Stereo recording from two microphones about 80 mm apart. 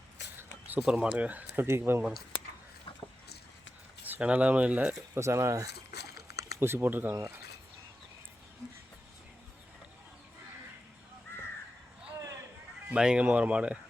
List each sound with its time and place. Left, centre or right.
0.8 s speech: centre
4.0 s speech: centre
5.1 s speech: right
7.1 s speech: right
11.3 s crow: left
12.9 s speech: centre